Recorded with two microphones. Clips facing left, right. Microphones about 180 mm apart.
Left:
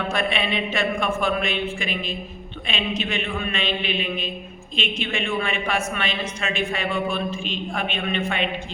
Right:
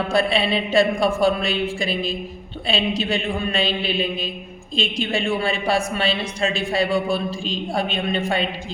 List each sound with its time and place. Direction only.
0.1 s a woman's voice: 35° right (ahead or behind)